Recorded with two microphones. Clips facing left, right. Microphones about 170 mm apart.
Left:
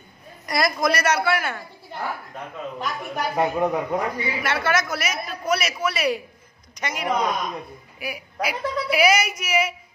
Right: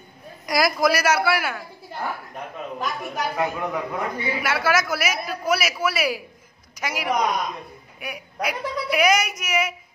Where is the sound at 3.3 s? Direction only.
30° left (ahead or behind).